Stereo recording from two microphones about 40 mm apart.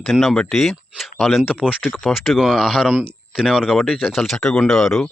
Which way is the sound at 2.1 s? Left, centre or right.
Centre.